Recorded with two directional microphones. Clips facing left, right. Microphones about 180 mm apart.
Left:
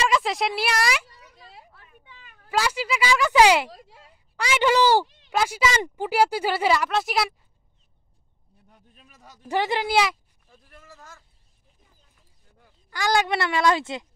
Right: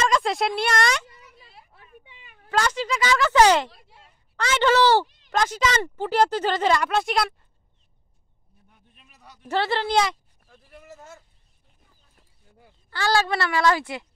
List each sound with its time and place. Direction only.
0.0 s speech: 5° left (ahead or behind)
1.8 s a sound: 20° right (ahead or behind)
2.5 s speech: 10° left (ahead or behind)
8.9 s speech: 40° left (ahead or behind)
9.5 s speech: 15° left (ahead or behind)
10.9 s speech: 25° right (ahead or behind)
12.9 s a woman's voice: 15° left (ahead or behind)